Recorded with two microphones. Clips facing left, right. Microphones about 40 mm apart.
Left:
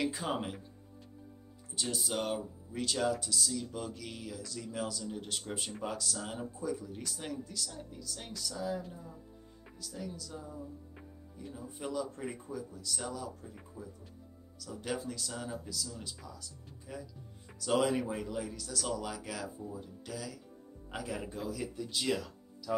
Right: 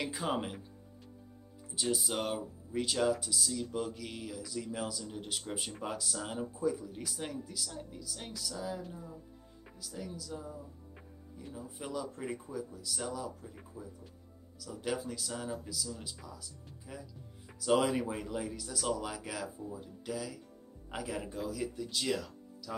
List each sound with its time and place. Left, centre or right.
0.0 s speech: centre
1.8 s speech: centre